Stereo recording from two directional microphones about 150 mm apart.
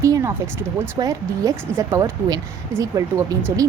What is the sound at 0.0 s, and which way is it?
A woman's voice, 20° right (ahead or behind).